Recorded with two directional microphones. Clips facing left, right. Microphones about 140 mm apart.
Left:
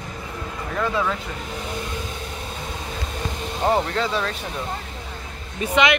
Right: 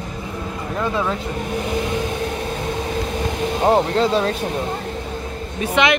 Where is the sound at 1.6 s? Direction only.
75° right (ahead or behind).